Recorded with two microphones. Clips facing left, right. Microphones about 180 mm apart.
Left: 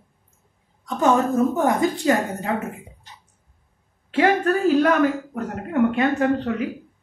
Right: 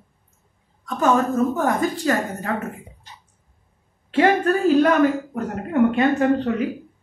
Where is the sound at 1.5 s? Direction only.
20° left (ahead or behind).